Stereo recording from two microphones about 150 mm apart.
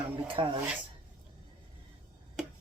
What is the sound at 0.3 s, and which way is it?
Speech, 35° right (ahead or behind).